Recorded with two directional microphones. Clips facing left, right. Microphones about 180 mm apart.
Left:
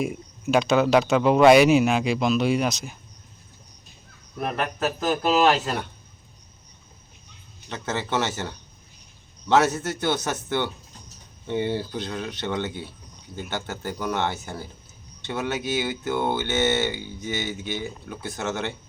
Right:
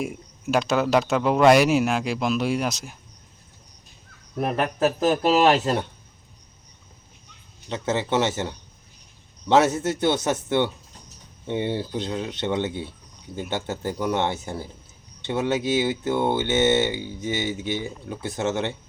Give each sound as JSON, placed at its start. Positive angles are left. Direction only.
{"t": 0.0, "sound": "speech", "side_deg": 0}
{"t": 4.4, "sound": "speech", "side_deg": -30}
{"t": 7.7, "sound": "speech", "side_deg": -25}